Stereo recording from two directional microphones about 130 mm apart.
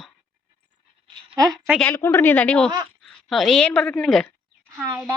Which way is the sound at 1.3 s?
30° right (ahead or behind).